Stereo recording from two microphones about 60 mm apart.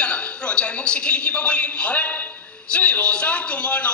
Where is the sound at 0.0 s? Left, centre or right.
Centre.